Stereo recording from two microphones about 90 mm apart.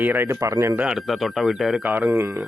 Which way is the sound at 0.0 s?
20° right (ahead or behind).